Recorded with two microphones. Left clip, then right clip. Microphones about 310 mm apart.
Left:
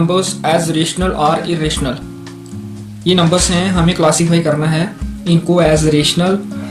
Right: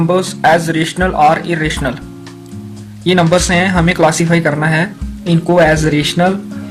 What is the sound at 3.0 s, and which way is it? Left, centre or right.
Speech, right.